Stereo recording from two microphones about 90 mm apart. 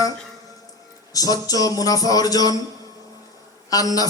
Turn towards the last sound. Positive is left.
turn(degrees=40)  # may be behind; listen again after turning